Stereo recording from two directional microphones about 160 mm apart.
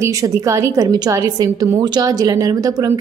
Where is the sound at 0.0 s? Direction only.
20° right (ahead or behind).